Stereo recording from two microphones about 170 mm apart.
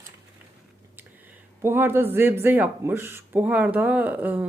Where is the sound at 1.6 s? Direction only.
15° right (ahead or behind).